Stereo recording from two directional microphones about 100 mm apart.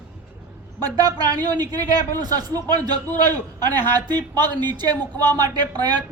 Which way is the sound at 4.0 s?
40° right (ahead or behind).